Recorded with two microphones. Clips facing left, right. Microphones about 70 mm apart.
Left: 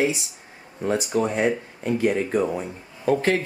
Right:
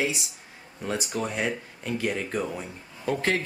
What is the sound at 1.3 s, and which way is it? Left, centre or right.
Speech, centre.